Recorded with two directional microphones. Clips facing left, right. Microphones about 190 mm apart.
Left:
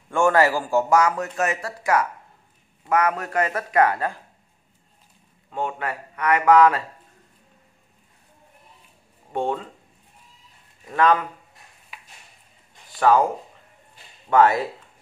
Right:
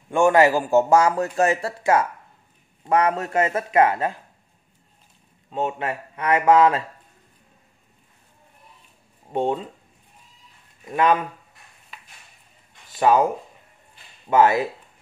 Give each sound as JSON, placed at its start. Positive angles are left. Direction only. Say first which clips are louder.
{"t": 0.1, "sound": "speech", "louder": "right 2 dB", "side_deg": -20}
{"t": 5.5, "sound": "speech", "louder": "right 2 dB", "side_deg": -20}
{"t": 9.3, "sound": "speech", "louder": "right 2 dB", "side_deg": -20}
{"t": 10.9, "sound": "speech", "louder": "even", "side_deg": -20}
{"t": 11.9, "sound": "a sound", "louder": "even", "side_deg": 10}
{"t": 12.9, "sound": "speech", "louder": "even", "side_deg": -20}
{"t": 14.3, "sound": "speech", "louder": "even", "side_deg": -15}